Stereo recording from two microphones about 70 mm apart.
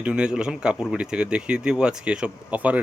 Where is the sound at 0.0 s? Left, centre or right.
Centre.